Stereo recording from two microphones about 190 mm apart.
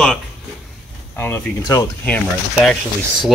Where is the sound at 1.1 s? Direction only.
10° left (ahead or behind).